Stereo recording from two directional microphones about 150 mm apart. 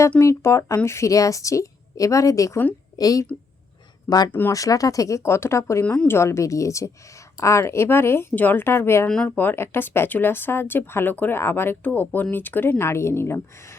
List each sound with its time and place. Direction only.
0.2 s a woman's voice: 20° left (ahead or behind)
4.3 s speech: 10° left (ahead or behind)
4.5 s a woman's voice: 25° left (ahead or behind)
9.0 s speech: 5° left (ahead or behind)